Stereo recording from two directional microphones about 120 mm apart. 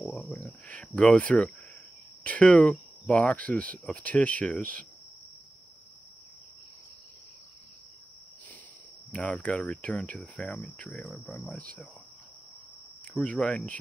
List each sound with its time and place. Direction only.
0.5 s speech: 10° left (ahead or behind)
9.1 s speech: 10° left (ahead or behind)
13.0 s speech: 10° left (ahead or behind)